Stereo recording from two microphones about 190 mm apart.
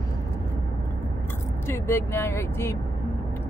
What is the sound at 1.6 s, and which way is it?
Speech, 15° left (ahead or behind).